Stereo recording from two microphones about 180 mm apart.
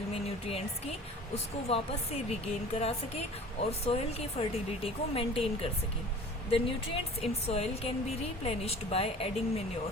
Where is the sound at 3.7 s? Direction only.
35° left (ahead or behind).